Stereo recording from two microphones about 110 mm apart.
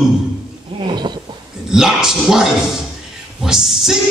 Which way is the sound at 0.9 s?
40° right (ahead or behind).